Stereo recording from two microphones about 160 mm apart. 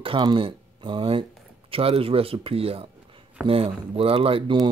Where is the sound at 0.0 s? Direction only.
30° right (ahead or behind).